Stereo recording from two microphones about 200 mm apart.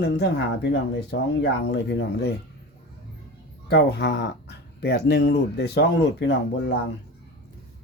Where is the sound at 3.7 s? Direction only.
55° left (ahead or behind).